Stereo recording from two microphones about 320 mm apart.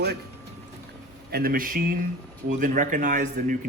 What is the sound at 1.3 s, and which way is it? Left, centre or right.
Speech, right.